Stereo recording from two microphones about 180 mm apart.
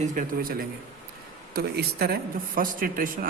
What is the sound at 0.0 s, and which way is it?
Speech, 45° right (ahead or behind).